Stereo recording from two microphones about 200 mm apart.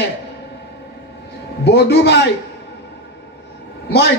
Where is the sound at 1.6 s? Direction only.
55° left (ahead or behind).